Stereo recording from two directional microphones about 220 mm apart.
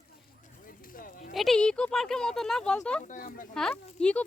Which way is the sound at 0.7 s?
40° left (ahead or behind).